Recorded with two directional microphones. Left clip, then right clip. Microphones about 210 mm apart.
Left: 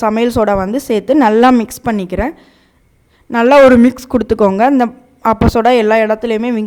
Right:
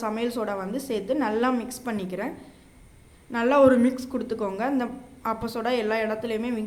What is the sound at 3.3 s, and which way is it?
Speech, 50° left (ahead or behind).